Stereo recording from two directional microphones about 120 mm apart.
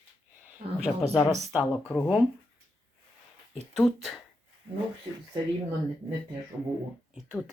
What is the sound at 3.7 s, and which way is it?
Speech, centre (ahead or behind).